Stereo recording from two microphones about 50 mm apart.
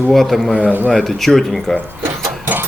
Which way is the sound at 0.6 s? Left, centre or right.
Right.